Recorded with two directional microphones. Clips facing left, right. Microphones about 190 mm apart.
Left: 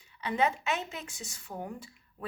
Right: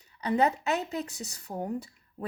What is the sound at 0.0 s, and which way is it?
A woman's voice, 40° right (ahead or behind).